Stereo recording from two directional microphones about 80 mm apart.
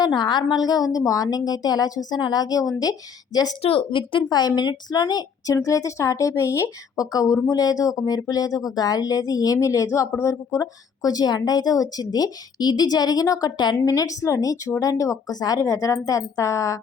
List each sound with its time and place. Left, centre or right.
0.0 s speech: left
3.8 s a woman's voice: left
5.6 s speech: left
10.6 s a woman's voice: left